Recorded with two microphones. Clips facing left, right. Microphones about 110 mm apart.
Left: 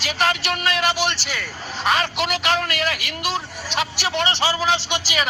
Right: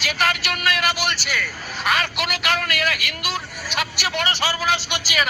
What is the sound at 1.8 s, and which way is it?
Speech, 35° left (ahead or behind).